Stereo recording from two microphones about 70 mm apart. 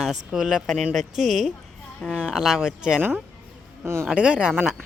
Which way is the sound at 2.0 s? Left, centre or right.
Centre.